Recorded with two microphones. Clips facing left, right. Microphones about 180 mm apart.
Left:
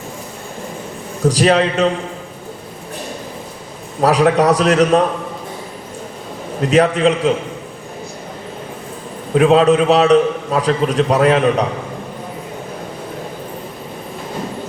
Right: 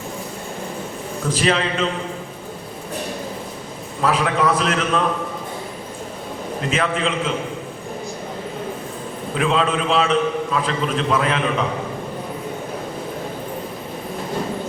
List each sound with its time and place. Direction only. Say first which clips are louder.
1.2 s a man's voice: left 7 dB; 40° left (ahead or behind)
4.0 s a man's voice: left 7 dB; 40° left (ahead or behind)
6.7 s a man's voice: left 9 dB; 40° left (ahead or behind)
9.3 s a man's voice: left 9 dB; 45° left (ahead or behind)